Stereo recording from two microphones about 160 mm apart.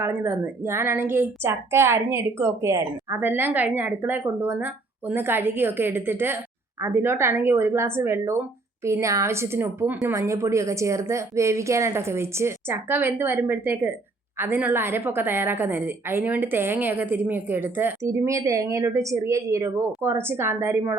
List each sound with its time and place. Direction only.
0.0 s a woman's voice: 15° right (ahead or behind)